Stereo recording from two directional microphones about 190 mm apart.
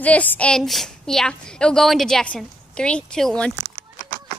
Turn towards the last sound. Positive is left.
turn(degrees=5)  # may be behind; listen again after turning